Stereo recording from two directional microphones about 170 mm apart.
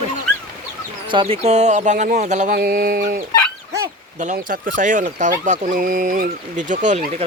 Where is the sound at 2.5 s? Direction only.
65° right (ahead or behind).